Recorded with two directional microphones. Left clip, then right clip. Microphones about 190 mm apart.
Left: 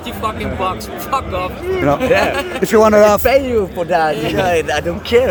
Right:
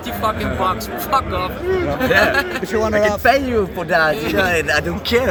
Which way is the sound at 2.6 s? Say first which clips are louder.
Left 10 dB; 60° left (ahead or behind).